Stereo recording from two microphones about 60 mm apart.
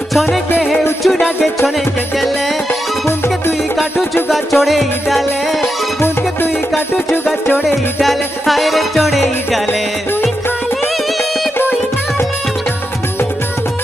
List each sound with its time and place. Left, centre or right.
0.1 s music: centre
3.7 s music: centre
5.6 s music: left
7.6 s music: centre